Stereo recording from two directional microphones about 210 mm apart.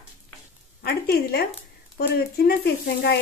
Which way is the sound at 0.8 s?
50° left (ahead or behind).